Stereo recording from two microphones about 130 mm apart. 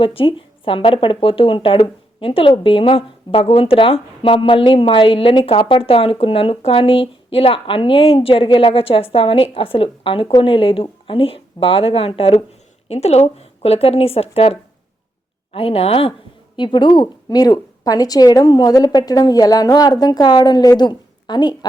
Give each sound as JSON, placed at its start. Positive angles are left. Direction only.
{"t": 0.0, "sound": "speech", "side_deg": 45}
{"t": 16.6, "sound": "a woman's voice", "side_deg": 35}